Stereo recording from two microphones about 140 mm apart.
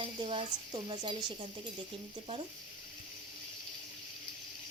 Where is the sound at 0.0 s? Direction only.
40° right (ahead or behind).